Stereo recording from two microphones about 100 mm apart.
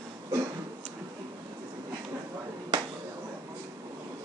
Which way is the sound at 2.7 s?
40° right (ahead or behind).